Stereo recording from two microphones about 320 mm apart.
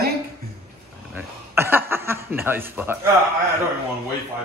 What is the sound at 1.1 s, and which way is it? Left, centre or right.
Speech, centre.